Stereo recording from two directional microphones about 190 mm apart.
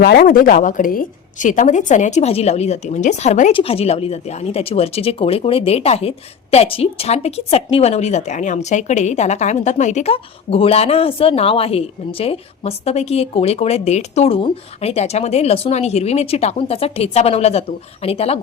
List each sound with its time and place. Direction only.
0.0 s a woman's voice: 55° left (ahead or behind); by 18.3 s 30° left (ahead or behind)